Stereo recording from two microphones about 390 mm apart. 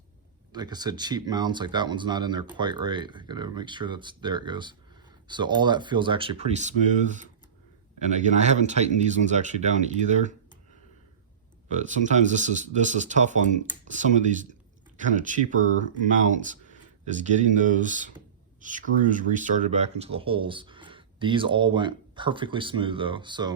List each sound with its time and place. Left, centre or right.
0.5 s speech: centre
11.7 s speech: centre